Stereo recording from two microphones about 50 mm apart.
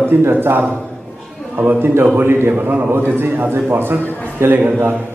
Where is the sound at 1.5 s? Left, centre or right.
Right.